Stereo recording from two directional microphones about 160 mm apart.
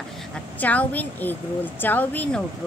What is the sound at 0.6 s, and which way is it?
A woman's voice, 10° left (ahead or behind).